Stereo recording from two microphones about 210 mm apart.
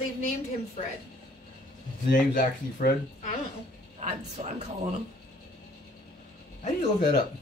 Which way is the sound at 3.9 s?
30° right (ahead or behind).